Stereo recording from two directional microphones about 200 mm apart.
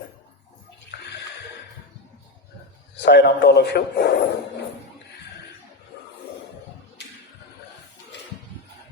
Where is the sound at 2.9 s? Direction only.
60° left (ahead or behind).